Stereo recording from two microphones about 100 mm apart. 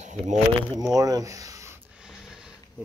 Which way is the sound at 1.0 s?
40° right (ahead or behind).